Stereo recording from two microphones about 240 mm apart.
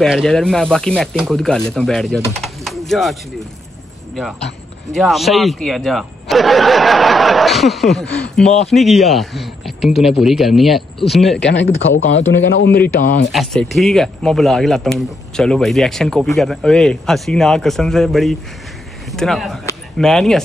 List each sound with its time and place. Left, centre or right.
0.0 s speech: centre
4.9 s speech: centre
11.4 s a man's voice: left
13.3 s speech: centre